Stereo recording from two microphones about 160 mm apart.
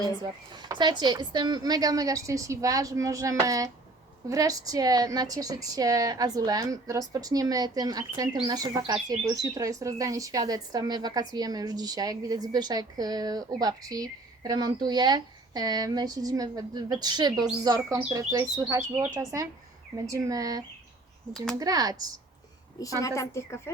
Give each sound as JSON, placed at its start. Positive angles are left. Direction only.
{"t": 0.0, "sound": "a woman's voice", "side_deg": -25}
{"t": 22.8, "sound": "a woman's voice", "side_deg": 20}